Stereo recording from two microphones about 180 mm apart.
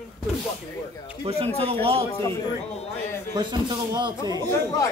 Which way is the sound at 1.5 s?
30° right (ahead or behind).